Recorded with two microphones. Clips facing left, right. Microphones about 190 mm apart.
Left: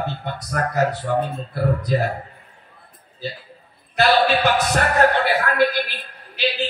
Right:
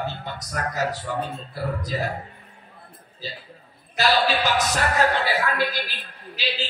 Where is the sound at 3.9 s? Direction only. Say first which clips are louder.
Left 4 dB; 60° left (ahead or behind).